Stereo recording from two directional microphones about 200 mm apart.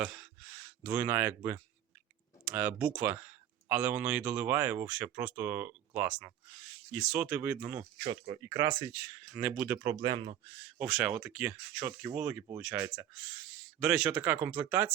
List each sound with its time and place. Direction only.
0.0 s speech: 5° right (ahead or behind)
8.0 s speech: 25° right (ahead or behind)
10.5 s speech: 5° right (ahead or behind)